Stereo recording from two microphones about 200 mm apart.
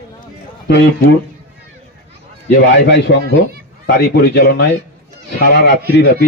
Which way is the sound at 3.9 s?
50° left (ahead or behind).